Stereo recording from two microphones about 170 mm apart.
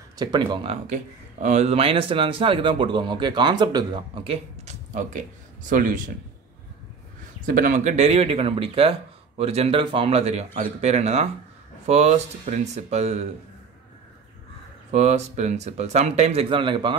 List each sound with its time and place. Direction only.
0.2 s speech: 25° right (ahead or behind)
0.8 s speech: 45° right (ahead or behind)
4.9 s speech: 50° right (ahead or behind)
7.4 s speech: 55° right (ahead or behind)
14.9 s speech: 40° right (ahead or behind)